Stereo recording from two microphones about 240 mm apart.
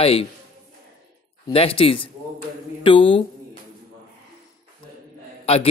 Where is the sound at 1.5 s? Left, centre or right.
Left.